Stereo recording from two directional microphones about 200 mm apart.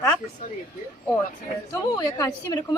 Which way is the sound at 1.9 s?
20° left (ahead or behind).